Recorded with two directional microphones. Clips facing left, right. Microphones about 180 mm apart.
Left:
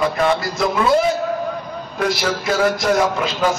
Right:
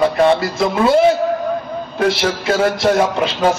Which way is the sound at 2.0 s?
30° right (ahead or behind).